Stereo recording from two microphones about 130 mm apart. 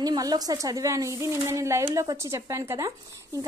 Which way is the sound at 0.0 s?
30° right (ahead or behind).